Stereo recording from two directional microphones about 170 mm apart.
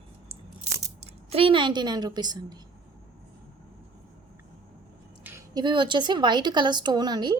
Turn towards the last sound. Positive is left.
turn(degrees=-25)  # may be behind; listen again after turning